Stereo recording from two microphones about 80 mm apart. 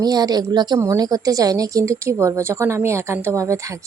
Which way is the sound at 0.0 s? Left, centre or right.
Right.